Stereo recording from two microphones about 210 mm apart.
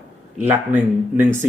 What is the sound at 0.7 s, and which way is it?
Speech, 10° right (ahead or behind).